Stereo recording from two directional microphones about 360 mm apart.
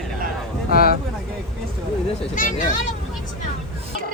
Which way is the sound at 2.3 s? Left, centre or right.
Left.